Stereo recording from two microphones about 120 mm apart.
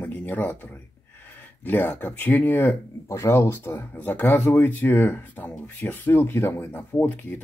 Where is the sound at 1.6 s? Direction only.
15° left (ahead or behind).